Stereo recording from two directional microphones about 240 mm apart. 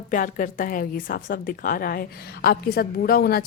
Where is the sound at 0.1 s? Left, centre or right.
Left.